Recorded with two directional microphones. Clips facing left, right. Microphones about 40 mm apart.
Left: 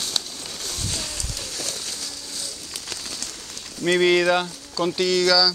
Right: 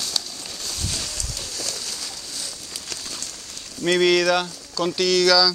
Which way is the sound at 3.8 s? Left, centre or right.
Centre.